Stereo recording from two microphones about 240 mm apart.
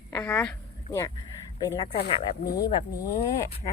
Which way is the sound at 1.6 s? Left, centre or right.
Centre.